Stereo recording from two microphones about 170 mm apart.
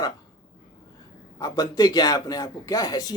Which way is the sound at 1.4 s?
20° left (ahead or behind).